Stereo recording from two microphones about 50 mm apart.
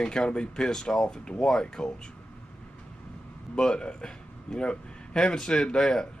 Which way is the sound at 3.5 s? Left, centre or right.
Centre.